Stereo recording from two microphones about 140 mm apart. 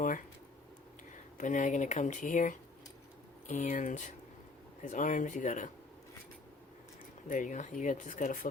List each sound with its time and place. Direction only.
1.4 s speech: 65° left (ahead or behind)
7.3 s speech: 70° left (ahead or behind)